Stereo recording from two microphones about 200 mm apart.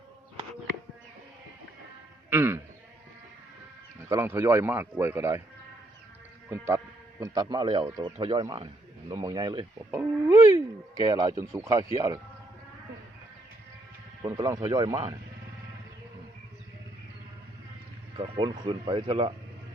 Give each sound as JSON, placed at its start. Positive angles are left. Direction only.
{"t": 2.3, "sound": "speech", "side_deg": -10}
{"t": 4.1, "sound": "a man's voice", "side_deg": -10}
{"t": 6.5, "sound": "speech", "side_deg": -15}
{"t": 10.0, "sound": "a man's voice", "side_deg": -10}
{"t": 14.2, "sound": "a man's voice", "side_deg": -15}
{"t": 18.2, "sound": "speech", "side_deg": -25}